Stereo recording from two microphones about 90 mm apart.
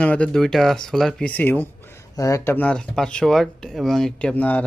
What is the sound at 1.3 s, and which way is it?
Speech, 20° left (ahead or behind).